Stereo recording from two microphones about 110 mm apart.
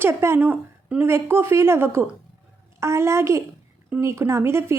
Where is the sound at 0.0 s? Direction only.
20° right (ahead or behind).